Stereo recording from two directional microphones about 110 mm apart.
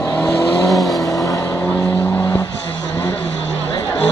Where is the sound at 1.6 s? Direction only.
15° left (ahead or behind).